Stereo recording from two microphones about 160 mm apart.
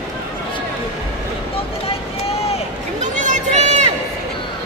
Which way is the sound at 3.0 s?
50° right (ahead or behind).